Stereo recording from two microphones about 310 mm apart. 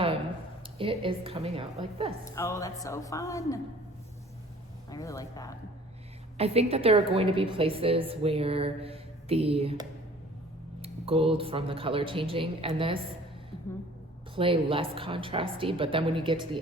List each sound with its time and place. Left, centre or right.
0.8 s a woman's voice: centre
2.2 s a woman's voice: centre
4.9 s a woman's voice: centre
6.3 s a woman's voice: centre
14.3 s a woman's voice: centre